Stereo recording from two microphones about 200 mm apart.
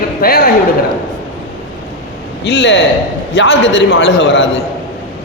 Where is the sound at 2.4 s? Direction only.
60° left (ahead or behind).